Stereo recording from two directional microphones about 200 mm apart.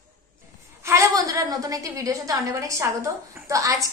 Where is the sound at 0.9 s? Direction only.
15° right (ahead or behind).